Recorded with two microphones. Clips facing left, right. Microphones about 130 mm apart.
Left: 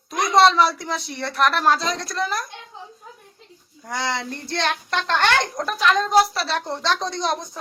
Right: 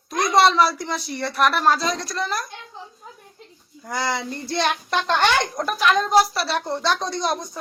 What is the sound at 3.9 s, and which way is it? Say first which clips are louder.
Speech: right 1 dB; 5° right (ahead or behind).